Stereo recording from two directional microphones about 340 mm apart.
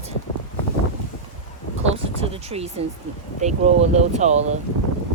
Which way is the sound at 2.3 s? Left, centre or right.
Centre.